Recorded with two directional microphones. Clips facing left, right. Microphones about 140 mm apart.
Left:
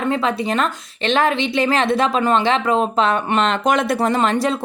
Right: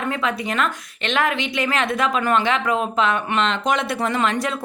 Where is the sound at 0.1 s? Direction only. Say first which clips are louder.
Left 5 dB; 30° left (ahead or behind).